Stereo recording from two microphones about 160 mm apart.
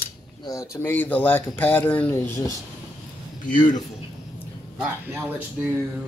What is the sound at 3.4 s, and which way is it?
Speech, 55° left (ahead or behind).